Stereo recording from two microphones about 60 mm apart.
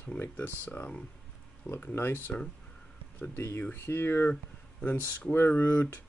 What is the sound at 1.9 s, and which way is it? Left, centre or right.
Speech, left.